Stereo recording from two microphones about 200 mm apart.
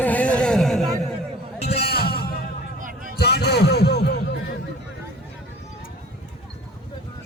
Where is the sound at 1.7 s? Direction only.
55° left (ahead or behind).